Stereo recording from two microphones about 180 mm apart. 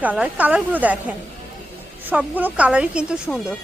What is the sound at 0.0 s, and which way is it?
Speech, 10° right (ahead or behind).